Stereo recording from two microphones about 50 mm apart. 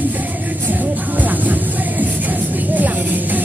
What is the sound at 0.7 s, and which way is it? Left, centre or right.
Vehicle, right.